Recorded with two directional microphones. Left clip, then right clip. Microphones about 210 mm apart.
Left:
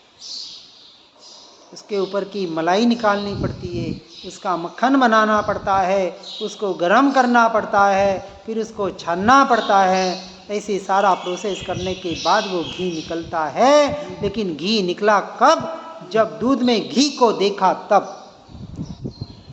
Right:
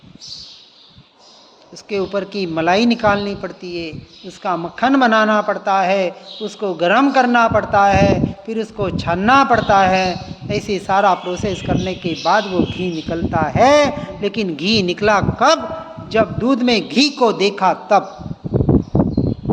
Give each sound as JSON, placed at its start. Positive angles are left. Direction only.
{"t": 1.9, "sound": "a woman's voice", "side_deg": -40}